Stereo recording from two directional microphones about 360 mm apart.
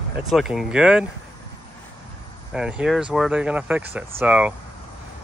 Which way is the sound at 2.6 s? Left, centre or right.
Centre.